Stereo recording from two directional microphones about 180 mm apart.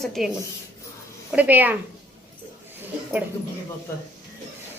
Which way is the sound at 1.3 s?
10° right (ahead or behind).